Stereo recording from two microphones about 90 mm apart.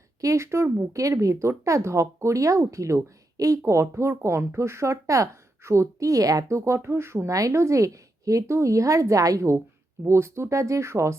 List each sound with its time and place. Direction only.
0.2 s a woman's voice: 35° right (ahead or behind)